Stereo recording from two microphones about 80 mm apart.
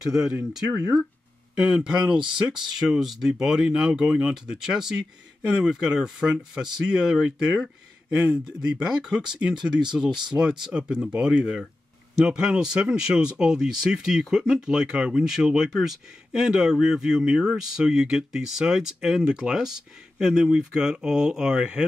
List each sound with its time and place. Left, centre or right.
0.0 s speech: centre
0.7 s speech: right